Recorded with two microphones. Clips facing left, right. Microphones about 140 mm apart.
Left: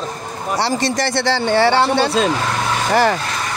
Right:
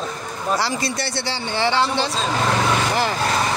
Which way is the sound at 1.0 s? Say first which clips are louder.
Left 9 dB; 80° left.